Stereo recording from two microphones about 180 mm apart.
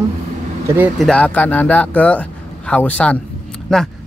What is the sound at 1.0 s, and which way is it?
Speech, 5° left (ahead or behind).